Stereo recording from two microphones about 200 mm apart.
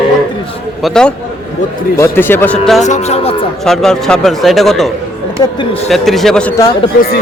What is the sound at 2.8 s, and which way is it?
Speech, 35° left (ahead or behind).